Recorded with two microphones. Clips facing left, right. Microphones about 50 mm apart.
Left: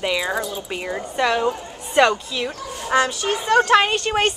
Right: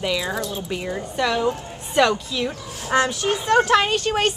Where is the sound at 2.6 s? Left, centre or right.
Centre.